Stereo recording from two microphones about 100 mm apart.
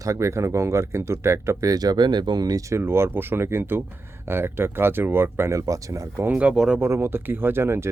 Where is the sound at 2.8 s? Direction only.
25° right (ahead or behind).